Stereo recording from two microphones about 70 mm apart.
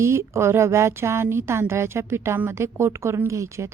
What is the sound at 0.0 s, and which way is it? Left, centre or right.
A woman's voice, right.